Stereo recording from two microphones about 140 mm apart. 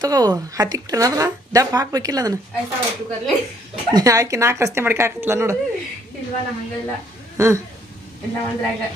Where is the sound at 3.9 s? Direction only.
25° right (ahead or behind).